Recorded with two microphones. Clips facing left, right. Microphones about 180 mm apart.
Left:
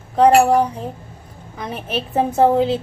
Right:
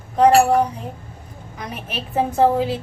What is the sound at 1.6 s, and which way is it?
A woman's voice, 30° left (ahead or behind).